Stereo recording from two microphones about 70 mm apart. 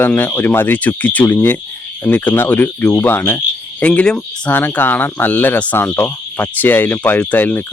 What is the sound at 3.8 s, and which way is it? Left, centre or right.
Speech, centre.